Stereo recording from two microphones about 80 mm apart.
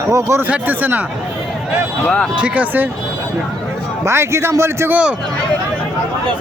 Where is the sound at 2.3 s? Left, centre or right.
Centre.